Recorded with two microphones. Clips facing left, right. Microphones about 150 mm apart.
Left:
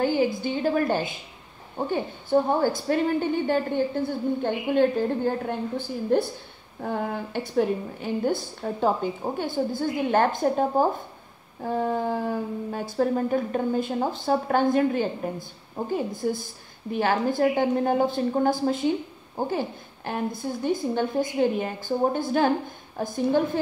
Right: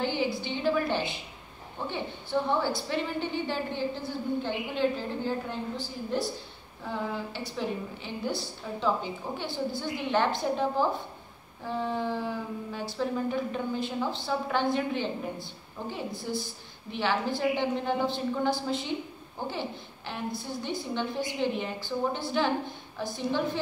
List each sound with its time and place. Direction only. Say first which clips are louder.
0.0 s speech: left 6 dB; 45° left (ahead or behind)